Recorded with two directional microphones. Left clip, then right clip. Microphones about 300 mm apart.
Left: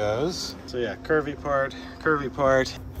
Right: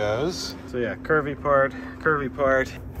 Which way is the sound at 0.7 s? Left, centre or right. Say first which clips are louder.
Right 1 dB; centre.